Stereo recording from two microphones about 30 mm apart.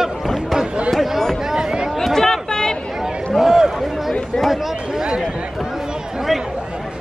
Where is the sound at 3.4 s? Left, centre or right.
Centre.